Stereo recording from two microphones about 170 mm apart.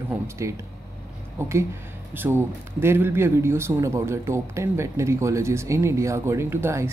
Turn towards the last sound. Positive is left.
turn(degrees=-15)  # may be behind; listen again after turning